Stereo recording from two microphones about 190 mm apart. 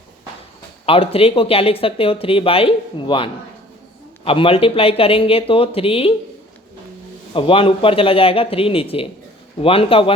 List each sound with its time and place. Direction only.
0.9 s speech: 30° left (ahead or behind)
7.3 s speech: 30° left (ahead or behind)